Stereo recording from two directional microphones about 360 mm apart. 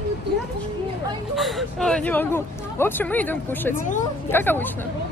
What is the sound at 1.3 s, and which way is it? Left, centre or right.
Speech, centre.